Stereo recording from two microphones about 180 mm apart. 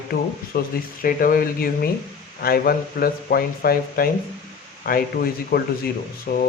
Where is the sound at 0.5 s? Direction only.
60° left (ahead or behind).